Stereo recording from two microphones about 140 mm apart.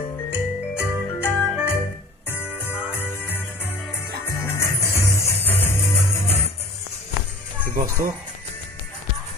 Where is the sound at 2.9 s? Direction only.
15° left (ahead or behind).